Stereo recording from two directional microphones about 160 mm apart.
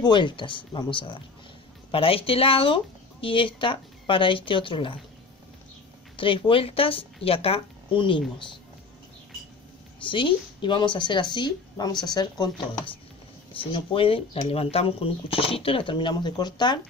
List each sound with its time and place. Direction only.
0.0 s speech: 30° left (ahead or behind)
6.1 s speech: 30° left (ahead or behind)
10.0 s a woman's voice: 30° left (ahead or behind)